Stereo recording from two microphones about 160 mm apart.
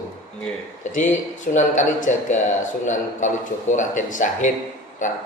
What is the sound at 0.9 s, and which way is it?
A man's voice, 55° left (ahead or behind).